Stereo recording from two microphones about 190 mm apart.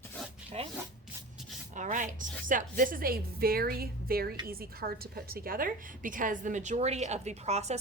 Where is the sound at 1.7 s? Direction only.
40° right (ahead or behind).